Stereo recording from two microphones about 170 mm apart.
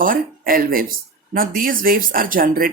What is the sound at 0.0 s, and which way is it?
Speech, 55° right (ahead or behind).